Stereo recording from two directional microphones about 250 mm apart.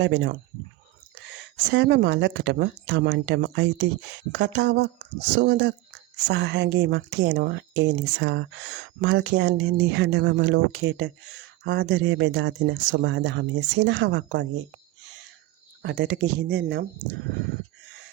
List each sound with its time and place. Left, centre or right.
0.0 s speech: right
15.8 s speech: right